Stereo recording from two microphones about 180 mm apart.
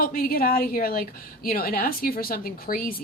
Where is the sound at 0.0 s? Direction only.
55° left (ahead or behind).